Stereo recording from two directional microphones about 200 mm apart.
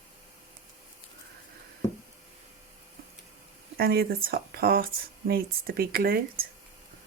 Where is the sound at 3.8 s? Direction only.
50° right (ahead or behind).